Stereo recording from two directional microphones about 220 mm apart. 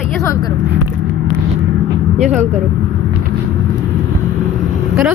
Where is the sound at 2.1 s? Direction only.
30° right (ahead or behind).